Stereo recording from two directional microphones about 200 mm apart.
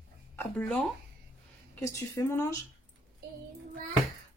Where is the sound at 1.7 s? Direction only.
15° left (ahead or behind).